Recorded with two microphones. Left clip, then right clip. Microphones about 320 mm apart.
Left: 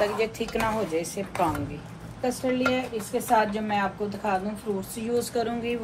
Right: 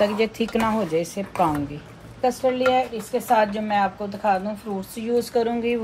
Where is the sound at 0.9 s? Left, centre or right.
Right.